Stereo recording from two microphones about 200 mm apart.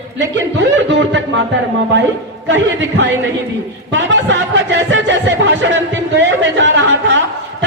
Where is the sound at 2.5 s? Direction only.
65° right (ahead or behind).